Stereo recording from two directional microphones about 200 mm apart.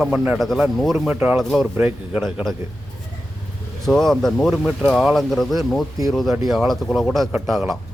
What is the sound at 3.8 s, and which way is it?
Speech, centre (ahead or behind).